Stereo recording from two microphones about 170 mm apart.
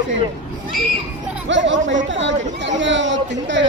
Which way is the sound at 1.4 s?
90° right.